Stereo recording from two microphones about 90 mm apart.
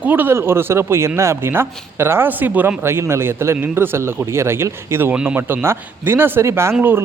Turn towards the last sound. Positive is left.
turn(degrees=-30)  # may be behind; listen again after turning